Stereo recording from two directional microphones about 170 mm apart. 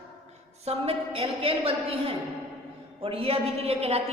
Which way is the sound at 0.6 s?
35° right (ahead or behind).